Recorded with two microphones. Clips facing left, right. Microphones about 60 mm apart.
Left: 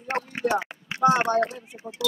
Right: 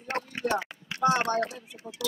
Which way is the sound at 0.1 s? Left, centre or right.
Left.